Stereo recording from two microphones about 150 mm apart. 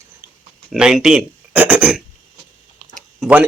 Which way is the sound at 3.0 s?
5° right (ahead or behind).